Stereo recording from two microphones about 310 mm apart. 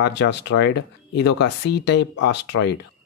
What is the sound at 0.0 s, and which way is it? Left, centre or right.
Speech, left.